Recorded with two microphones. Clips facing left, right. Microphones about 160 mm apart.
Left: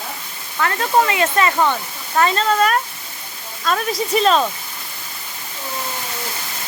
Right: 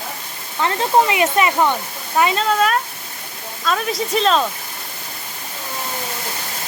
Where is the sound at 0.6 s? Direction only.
20° right (ahead or behind); by 4.4 s 5° left (ahead or behind).